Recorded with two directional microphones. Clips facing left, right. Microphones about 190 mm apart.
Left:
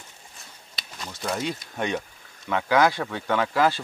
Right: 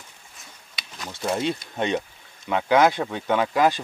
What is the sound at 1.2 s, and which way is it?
Speech, 25° right (ahead or behind).